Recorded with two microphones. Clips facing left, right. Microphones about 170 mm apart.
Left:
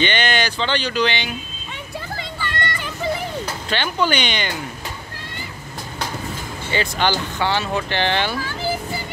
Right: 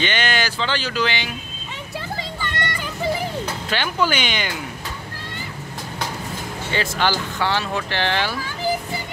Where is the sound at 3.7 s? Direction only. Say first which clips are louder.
Left 1 dB; 5° right (ahead or behind).